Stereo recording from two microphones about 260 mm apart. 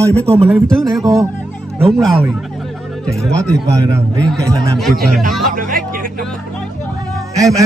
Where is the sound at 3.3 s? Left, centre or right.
Centre.